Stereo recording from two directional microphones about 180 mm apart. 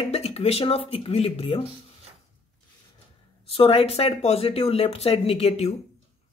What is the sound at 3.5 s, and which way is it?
A woman's voice, 30° left (ahead or behind).